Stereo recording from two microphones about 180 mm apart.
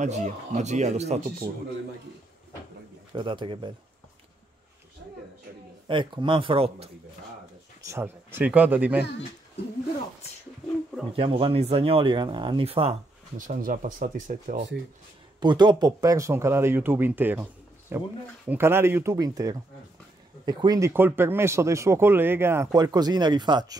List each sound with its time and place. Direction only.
0.0 s speech: 40° right (ahead or behind)
3.2 s speech: 25° right (ahead or behind)
5.9 s speech: 25° right (ahead or behind)
7.8 s speech: 15° right (ahead or behind)
11.1 s speech: 30° right (ahead or behind)
13.4 s speech: 50° right (ahead or behind)
15.4 s speech: 25° right (ahead or behind)